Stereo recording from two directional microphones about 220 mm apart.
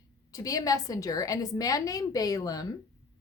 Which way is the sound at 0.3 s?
15° left (ahead or behind).